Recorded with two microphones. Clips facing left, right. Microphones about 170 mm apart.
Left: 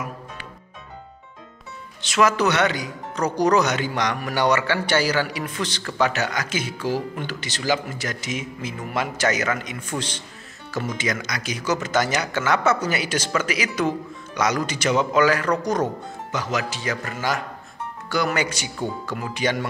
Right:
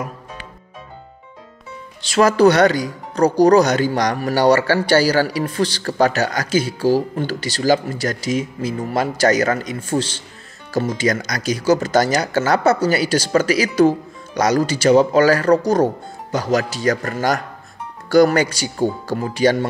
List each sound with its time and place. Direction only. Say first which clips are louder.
2.0 s speech: right 7 dB; 35° right (ahead or behind)